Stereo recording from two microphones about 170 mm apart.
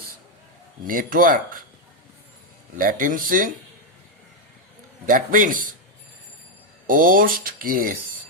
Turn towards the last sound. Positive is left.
turn(degrees=-55)  # may be behind; listen again after turning